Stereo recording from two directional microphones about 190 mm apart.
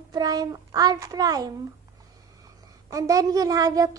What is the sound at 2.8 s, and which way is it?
A child's voice, 15° right (ahead or behind).